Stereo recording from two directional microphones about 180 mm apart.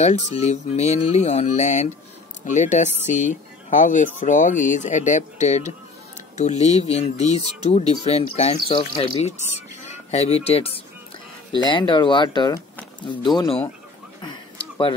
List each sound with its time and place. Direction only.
0.0 s speech: 35° left (ahead or behind)